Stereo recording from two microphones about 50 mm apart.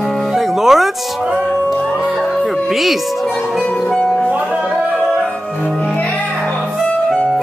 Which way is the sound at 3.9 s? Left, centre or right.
Centre.